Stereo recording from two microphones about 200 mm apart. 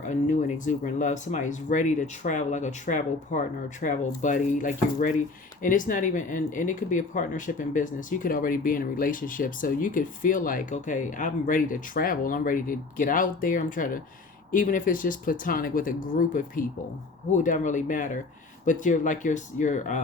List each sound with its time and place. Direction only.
0.1 s speech: 35° left (ahead or behind)